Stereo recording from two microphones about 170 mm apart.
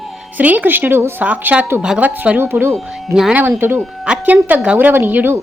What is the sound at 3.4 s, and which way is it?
Speech, 15° right (ahead or behind).